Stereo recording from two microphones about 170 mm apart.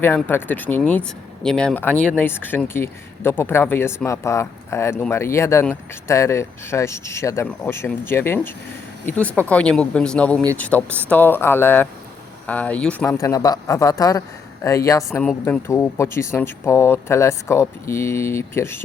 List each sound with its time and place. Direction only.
0.0 s speech: 10° left (ahead or behind)
10.8 s speech: 15° right (ahead or behind)
11.1 s speech: 10° left (ahead or behind)
15.2 s speech: 5° left (ahead or behind)